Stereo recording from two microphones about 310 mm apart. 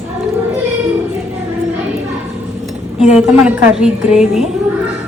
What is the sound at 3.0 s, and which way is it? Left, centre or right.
A woman's voice, centre.